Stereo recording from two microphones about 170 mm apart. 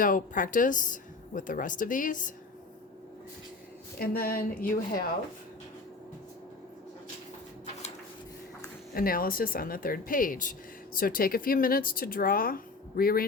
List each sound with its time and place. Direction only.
0.0 s a woman's voice: 50° left (ahead or behind)
3.9 s speech: 60° left (ahead or behind)
9.0 s speech: 60° left (ahead or behind)